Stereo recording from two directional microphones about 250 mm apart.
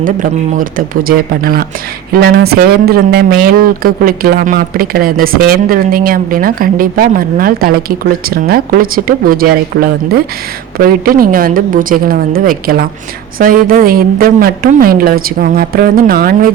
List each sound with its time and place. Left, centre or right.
0.0 s speech: right